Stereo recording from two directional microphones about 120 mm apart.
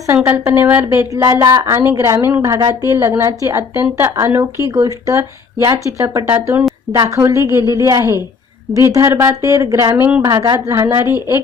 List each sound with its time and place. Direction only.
0.1 s a woman's voice: 25° right (ahead or behind)